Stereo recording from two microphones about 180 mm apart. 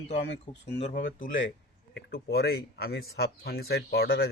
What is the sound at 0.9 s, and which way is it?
Speech, 50° left (ahead or behind).